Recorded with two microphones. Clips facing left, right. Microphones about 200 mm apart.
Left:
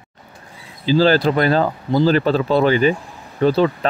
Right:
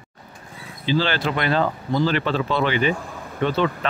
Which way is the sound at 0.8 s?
40° left (ahead or behind).